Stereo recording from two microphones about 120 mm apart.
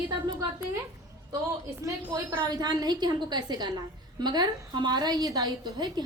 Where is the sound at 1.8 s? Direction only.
30° right (ahead or behind).